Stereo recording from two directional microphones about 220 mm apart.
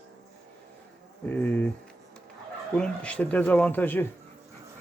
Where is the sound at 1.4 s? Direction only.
10° left (ahead or behind).